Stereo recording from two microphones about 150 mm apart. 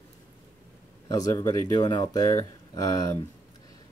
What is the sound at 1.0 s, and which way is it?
Speech, 25° left (ahead or behind).